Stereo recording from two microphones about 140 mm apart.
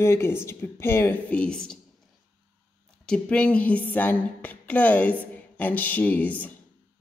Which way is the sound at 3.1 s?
10° left (ahead or behind).